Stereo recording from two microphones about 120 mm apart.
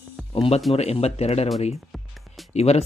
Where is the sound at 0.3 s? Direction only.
55° left (ahead or behind).